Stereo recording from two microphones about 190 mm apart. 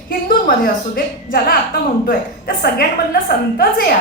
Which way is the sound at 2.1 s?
50° left (ahead or behind).